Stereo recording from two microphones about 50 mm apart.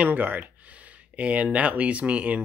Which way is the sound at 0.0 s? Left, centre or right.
Right.